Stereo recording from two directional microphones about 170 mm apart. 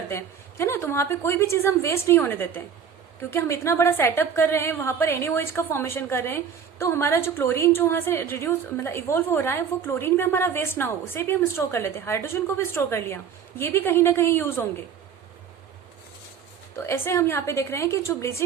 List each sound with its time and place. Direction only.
0.1 s a woman's voice: 15° left (ahead or behind)
16.7 s a woman's voice: 15° left (ahead or behind)